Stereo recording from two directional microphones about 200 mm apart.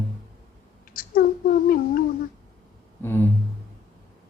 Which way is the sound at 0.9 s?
45° left (ahead or behind).